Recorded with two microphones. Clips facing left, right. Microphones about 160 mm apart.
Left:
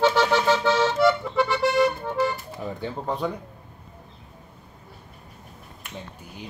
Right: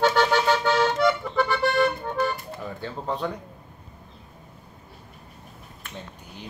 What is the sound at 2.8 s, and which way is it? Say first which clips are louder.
Speech: left 1 dB; 15° left (ahead or behind).